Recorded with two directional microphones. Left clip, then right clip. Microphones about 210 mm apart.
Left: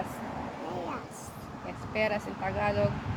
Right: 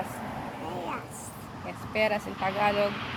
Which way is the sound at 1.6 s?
20° right (ahead or behind).